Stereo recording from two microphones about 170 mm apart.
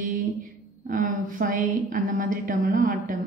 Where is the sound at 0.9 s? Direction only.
55° right (ahead or behind).